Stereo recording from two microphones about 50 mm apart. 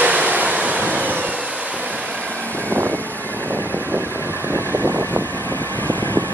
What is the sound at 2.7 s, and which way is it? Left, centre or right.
Vehicle, right.